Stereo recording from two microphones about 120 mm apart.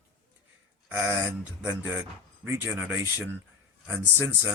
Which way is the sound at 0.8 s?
15° right (ahead or behind).